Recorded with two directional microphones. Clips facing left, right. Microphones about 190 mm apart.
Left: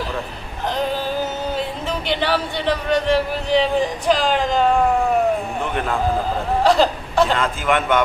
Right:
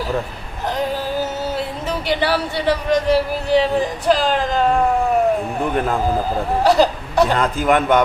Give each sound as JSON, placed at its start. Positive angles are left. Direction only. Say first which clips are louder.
{"t": 1.9, "sound": "speech", "louder": "right 2 dB", "side_deg": -10}
{"t": 6.7, "sound": "speech", "louder": "right 2 dB", "side_deg": -10}
{"t": 7.3, "sound": "a man's voice", "louder": "right 3 dB", "side_deg": -40}